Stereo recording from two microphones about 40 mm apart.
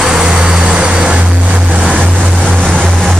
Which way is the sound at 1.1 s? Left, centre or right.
Right.